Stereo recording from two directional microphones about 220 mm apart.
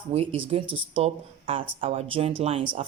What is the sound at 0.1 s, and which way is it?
Speech, 25° right (ahead or behind).